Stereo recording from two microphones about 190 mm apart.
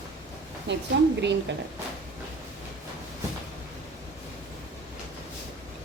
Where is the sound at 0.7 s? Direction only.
70° right (ahead or behind).